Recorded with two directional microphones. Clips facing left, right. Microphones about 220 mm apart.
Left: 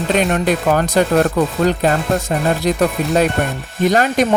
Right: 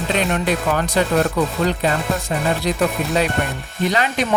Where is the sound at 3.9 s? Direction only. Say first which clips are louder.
Left 6 dB; 45° left (ahead or behind).